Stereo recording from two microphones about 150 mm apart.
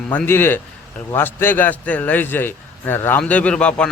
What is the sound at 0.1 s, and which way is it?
A man's voice, 10° left (ahead or behind).